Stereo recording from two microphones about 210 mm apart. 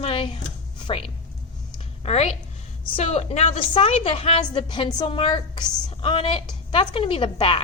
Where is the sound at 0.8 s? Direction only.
25° left (ahead or behind).